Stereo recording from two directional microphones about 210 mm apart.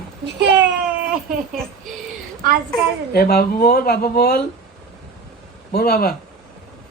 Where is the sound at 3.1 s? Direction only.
45° left (ahead or behind).